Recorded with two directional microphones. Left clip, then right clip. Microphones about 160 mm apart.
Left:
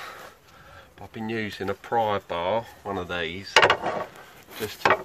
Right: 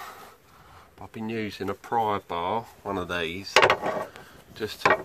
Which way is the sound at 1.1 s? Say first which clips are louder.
Left 2 dB; 10° right (ahead or behind).